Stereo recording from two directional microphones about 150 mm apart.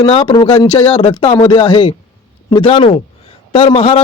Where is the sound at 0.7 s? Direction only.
50° left (ahead or behind).